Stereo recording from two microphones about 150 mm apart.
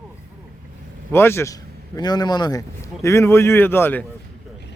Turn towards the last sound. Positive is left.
turn(degrees=15)  # may be behind; listen again after turning